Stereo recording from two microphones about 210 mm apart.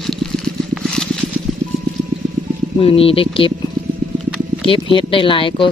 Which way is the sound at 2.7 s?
25° left (ahead or behind).